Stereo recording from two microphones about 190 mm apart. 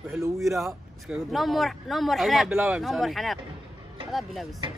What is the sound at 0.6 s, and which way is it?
Speech, centre (ahead or behind).